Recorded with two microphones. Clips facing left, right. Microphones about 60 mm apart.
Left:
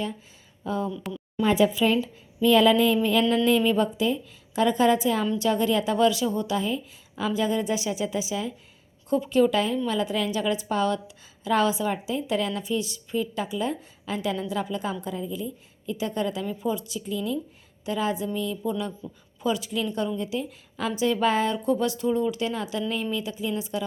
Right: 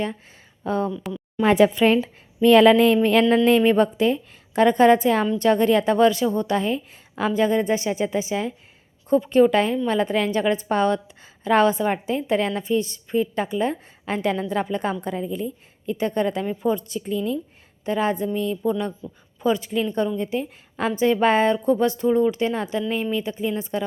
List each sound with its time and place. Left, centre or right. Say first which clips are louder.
0.6 s speech: right 5 dB; right
1.4 s a woman's voice: right 5 dB; right
3.2 s a woman's voice: right 5 dB; right
15.4 s a woman's voice: right 4 dB; right